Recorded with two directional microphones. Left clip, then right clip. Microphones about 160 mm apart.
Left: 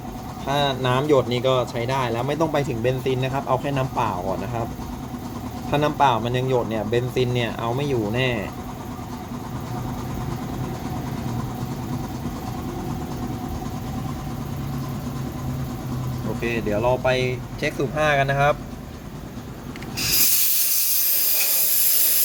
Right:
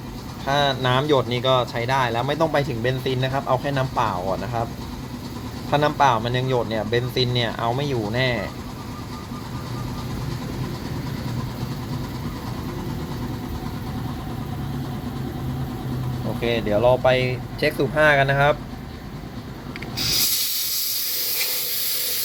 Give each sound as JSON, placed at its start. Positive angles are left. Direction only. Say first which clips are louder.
{"t": 0.4, "sound": "speech", "louder": "right 2 dB", "side_deg": -5}
{"t": 5.7, "sound": "speech", "louder": "right 1 dB", "side_deg": 0}
{"t": 16.4, "sound": "speech", "louder": "right 4 dB", "side_deg": -15}
{"t": 20.0, "sound": "a sound", "louder": "right 1 dB", "side_deg": 15}